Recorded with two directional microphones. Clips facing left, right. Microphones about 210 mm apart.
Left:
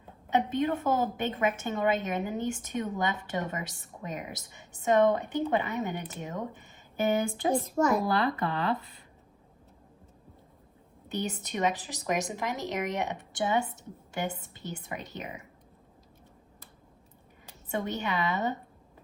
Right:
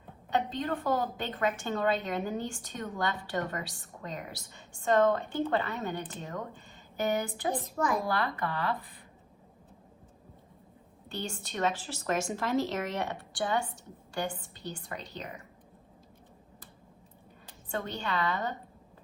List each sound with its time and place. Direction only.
0.3 s a woman's voice: 15° left (ahead or behind)
11.1 s a woman's voice: 20° left (ahead or behind)
17.7 s a woman's voice: 20° left (ahead or behind)